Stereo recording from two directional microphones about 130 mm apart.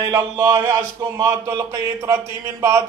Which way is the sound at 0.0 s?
25° right (ahead or behind).